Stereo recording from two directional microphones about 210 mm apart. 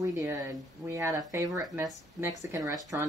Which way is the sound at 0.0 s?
15° right (ahead or behind).